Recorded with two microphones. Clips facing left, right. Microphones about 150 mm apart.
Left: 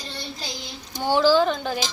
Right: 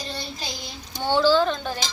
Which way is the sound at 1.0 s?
15° left (ahead or behind).